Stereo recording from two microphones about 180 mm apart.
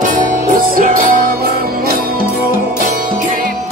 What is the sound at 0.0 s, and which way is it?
Music, 50° right (ahead or behind).